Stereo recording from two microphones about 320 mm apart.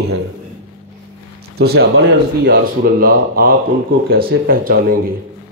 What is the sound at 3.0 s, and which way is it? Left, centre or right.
Speech, right.